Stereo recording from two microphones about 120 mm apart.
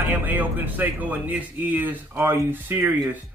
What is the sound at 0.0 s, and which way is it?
A man's voice, 15° right (ahead or behind).